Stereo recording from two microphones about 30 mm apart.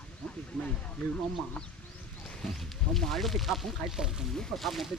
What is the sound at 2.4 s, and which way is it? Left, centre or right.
Speech, centre.